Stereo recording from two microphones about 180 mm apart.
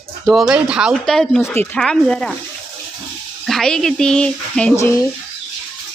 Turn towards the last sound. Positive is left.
turn(degrees=15)  # may be behind; listen again after turning